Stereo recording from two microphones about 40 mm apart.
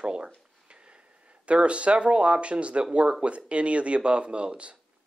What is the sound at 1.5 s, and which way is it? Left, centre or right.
Speech, right.